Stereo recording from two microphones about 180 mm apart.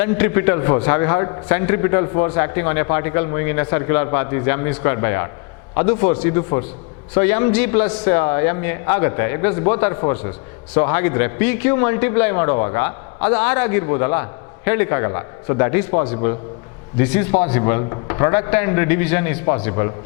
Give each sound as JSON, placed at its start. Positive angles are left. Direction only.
{"t": 0.0, "sound": "a man's voice", "side_deg": 15}